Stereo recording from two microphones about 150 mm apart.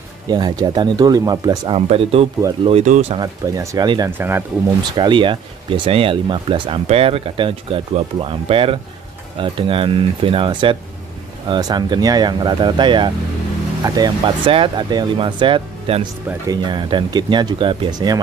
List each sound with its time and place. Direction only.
0.3 s speech: 30° right (ahead or behind)
1.9 s speech: 40° right (ahead or behind)
3.2 s speech: 25° right (ahead or behind)
4.2 s speech: 15° right (ahead or behind)
4.9 s speech: 30° right (ahead or behind)